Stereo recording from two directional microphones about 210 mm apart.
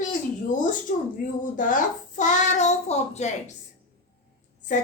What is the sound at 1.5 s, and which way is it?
Child singing, 40° left (ahead or behind).